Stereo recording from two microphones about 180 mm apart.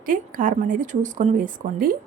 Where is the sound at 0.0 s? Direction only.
50° right (ahead or behind).